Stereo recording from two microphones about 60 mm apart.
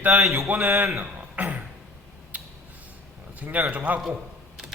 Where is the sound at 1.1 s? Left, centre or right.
Right.